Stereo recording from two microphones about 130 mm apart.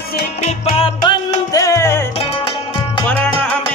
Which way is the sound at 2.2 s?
40° left (ahead or behind).